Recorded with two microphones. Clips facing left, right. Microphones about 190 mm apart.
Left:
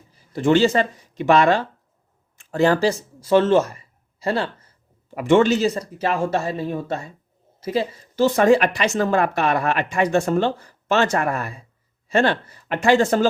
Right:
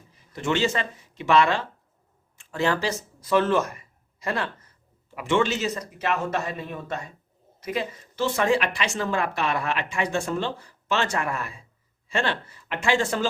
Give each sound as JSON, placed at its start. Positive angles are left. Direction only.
{"t": 0.1, "sound": "speech", "side_deg": 35}
{"t": 5.1, "sound": "speech", "side_deg": 45}